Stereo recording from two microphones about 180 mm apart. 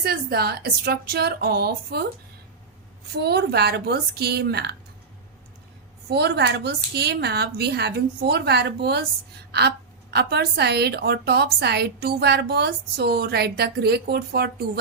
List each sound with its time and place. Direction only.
0.0 s a woman's voice: 60° right (ahead or behind)
3.2 s a woman's voice: 65° right (ahead or behind)
6.1 s a woman's voice: 65° right (ahead or behind)